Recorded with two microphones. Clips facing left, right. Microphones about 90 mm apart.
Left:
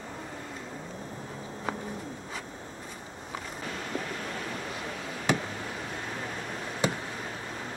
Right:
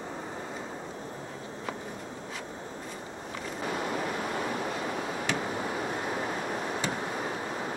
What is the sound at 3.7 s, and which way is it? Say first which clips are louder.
Waves: right 4 dB; 20° right (ahead or behind).